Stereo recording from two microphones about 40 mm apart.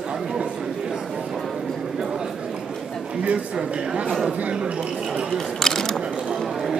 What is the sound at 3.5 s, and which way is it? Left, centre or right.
A woman's voice, right.